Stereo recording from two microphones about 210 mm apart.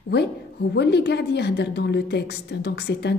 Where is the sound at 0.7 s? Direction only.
50° left (ahead or behind).